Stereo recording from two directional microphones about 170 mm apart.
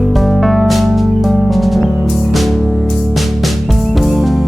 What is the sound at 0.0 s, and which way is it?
Music, centre (ahead or behind).